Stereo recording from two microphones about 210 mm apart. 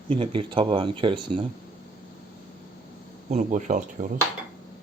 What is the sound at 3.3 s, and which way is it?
Speech, 35° right (ahead or behind).